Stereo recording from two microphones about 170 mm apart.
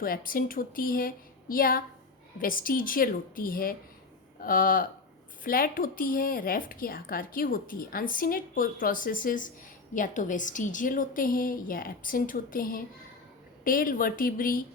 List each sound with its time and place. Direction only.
0.0 s a woman's voice: 55° left (ahead or behind)